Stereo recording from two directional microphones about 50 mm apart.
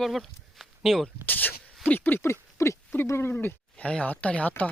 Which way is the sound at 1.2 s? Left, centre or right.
Left.